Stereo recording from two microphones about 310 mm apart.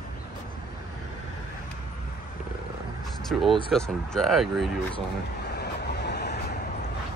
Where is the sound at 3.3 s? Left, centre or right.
Centre.